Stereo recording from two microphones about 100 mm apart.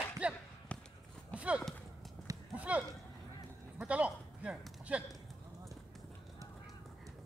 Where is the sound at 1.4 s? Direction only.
10° right (ahead or behind).